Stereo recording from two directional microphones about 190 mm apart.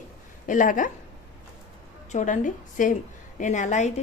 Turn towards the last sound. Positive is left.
turn(degrees=40)  # may be behind; listen again after turning